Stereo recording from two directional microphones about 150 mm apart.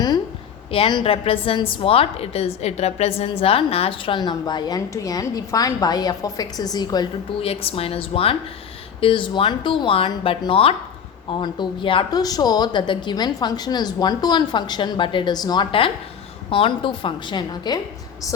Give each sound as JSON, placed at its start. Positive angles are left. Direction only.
{"t": 0.7, "sound": "a woman's voice", "side_deg": 35}
{"t": 7.4, "sound": "a woman's voice", "side_deg": 40}